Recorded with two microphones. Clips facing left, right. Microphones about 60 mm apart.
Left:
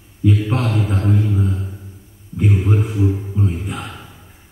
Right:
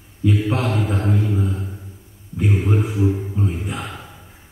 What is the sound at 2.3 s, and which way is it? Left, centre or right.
Speech, centre.